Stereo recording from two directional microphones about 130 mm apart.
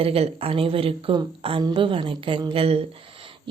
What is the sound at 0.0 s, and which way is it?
A woman's voice, 50° right (ahead or behind).